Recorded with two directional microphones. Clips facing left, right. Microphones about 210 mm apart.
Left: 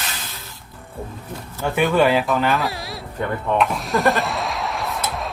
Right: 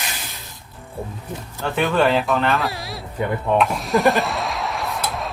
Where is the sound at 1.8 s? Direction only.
10° left (ahead or behind).